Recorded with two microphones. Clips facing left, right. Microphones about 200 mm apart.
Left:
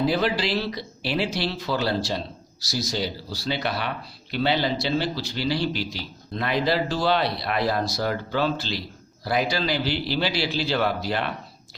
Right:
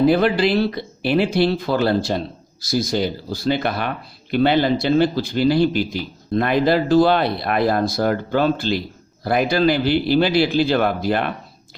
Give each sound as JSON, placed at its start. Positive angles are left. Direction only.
{"t": 0.0, "sound": "speech", "side_deg": -55}